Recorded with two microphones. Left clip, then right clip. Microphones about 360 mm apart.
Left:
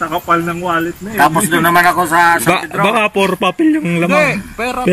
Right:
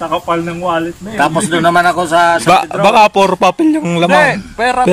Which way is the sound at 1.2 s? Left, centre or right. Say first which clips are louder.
Left 1 dB; centre.